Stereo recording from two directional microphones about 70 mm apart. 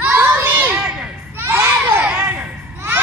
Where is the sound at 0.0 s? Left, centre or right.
Right.